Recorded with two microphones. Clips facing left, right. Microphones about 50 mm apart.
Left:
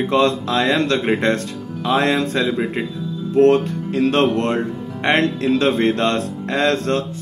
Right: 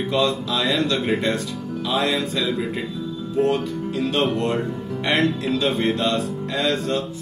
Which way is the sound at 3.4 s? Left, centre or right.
Left.